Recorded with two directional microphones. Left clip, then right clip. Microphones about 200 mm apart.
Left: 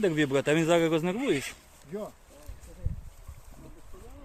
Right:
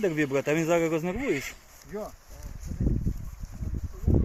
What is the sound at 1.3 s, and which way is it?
Speech, 60° left (ahead or behind).